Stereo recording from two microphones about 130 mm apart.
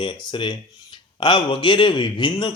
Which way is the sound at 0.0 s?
40° left (ahead or behind).